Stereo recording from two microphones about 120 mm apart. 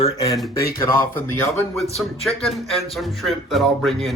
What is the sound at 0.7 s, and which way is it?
Speech, 20° left (ahead or behind).